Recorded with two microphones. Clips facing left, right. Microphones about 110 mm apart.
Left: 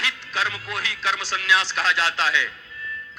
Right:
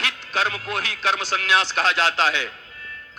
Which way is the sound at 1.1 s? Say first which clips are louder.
Right 1 dB; 20° right (ahead or behind).